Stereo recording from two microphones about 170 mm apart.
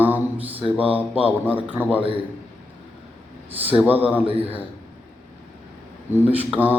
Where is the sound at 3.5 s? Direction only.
10° right (ahead or behind).